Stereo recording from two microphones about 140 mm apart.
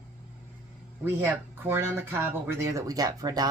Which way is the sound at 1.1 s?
15° right (ahead or behind).